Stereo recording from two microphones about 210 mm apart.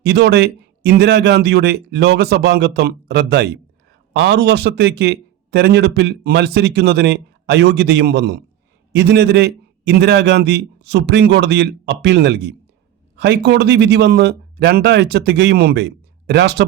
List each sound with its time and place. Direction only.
0.0 s a man's voice: 50° right (ahead or behind)